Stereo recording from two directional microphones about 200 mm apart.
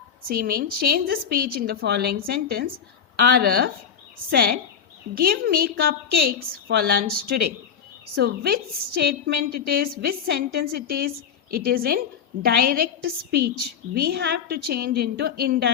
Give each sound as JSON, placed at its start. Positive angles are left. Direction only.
{"t": 0.3, "sound": "a woman's voice", "side_deg": -50}